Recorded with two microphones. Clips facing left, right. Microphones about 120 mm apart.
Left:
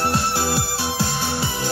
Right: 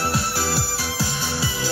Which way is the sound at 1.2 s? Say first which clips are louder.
Left 2 dB; 55° left (ahead or behind).